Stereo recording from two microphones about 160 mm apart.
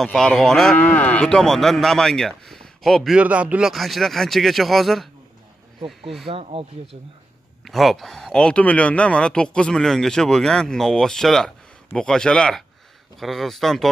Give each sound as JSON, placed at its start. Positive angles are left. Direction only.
{"t": 0.0, "sound": "speech", "side_deg": 0}
{"t": 6.2, "sound": "speech", "side_deg": -35}
{"t": 7.6, "sound": "speech", "side_deg": 0}